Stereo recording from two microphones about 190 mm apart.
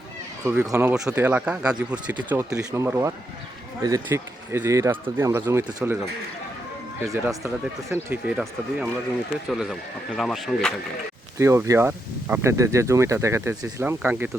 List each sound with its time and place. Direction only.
0.4 s speech: 10° right (ahead or behind)
7.1 s speech: 15° right (ahead or behind)
8.1 s speech: 5° right (ahead or behind)
11.3 s speech: 15° right (ahead or behind)